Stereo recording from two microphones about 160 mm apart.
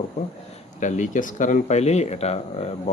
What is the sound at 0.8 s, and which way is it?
Speech, 50° left (ahead or behind).